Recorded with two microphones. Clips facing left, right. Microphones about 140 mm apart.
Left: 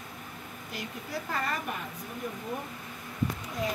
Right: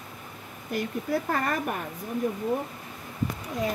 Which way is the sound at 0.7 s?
50° right (ahead or behind).